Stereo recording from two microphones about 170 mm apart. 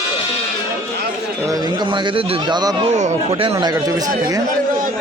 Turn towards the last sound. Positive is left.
turn(degrees=-20)  # may be behind; listen again after turning